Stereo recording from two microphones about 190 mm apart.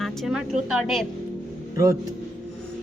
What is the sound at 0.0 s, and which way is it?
A woman's voice, centre (ahead or behind).